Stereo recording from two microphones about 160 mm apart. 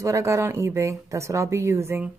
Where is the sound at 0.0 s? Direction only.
20° right (ahead or behind).